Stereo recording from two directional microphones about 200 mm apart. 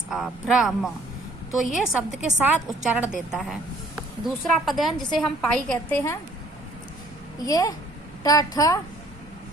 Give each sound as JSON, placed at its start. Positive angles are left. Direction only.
{"t": 0.1, "sound": "a woman's voice", "side_deg": -5}
{"t": 7.3, "sound": "a woman's voice", "side_deg": 15}